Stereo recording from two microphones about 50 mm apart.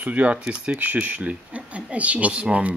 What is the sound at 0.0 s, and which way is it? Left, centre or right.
Speech, right.